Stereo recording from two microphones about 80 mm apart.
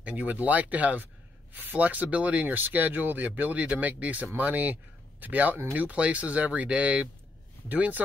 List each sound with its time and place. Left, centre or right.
0.0 s speech: centre